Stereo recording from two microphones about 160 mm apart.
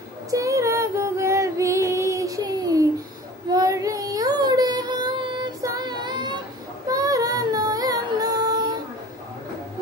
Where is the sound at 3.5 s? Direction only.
20° right (ahead or behind).